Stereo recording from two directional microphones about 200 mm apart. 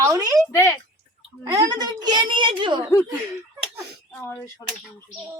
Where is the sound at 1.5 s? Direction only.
20° right (ahead or behind).